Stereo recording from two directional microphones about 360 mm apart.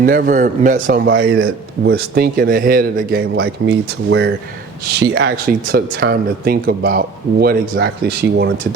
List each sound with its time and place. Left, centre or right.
0.0 s a man's voice: right